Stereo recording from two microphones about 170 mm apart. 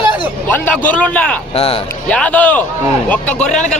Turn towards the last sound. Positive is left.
turn(degrees=5)  # may be behind; listen again after turning